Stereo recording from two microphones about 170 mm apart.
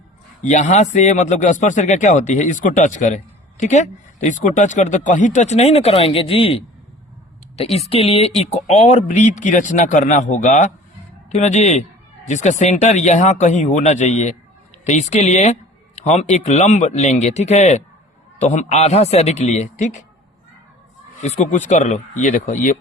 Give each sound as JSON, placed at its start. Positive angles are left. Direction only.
{"t": 0.4, "sound": "a man's voice", "side_deg": 45}
{"t": 21.2, "sound": "speech", "side_deg": 45}